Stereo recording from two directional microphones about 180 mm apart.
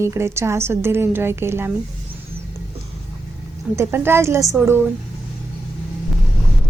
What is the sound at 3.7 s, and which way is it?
Speech, 15° right (ahead or behind).